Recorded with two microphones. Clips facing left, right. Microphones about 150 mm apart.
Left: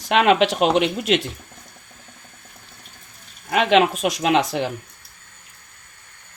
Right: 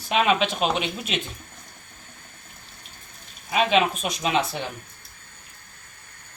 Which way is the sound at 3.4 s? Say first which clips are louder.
Left 4 dB; 70° left (ahead or behind).